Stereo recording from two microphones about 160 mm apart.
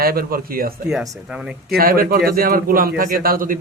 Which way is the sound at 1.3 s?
5° right (ahead or behind).